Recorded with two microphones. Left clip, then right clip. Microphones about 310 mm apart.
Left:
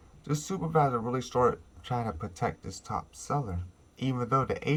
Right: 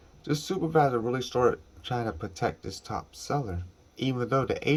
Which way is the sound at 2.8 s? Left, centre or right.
Left.